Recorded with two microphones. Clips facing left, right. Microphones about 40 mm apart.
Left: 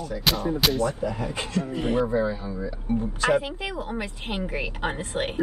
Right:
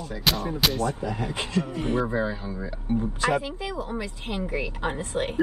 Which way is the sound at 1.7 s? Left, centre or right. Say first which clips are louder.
Left 2 dB; left.